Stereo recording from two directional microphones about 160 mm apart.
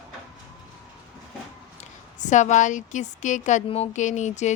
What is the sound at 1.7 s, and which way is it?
A woman's voice, 50° left (ahead or behind).